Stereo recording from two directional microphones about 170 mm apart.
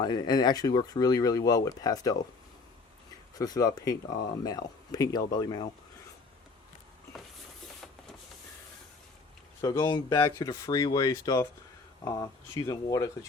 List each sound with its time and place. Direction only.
0.0 s speech: 25° left (ahead or behind)
3.3 s speech: 20° left (ahead or behind)
9.6 s speech: 20° left (ahead or behind)